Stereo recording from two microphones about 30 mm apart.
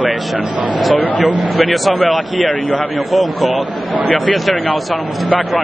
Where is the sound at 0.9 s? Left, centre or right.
Left.